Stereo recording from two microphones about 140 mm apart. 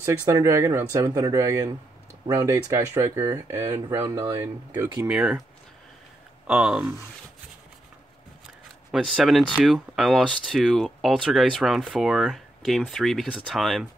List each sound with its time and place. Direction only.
0.0 s speech: 25° right (ahead or behind)
5.0 s speech: 10° right (ahead or behind)
6.4 s speech: 10° right (ahead or behind)
8.9 s speech: centre (ahead or behind)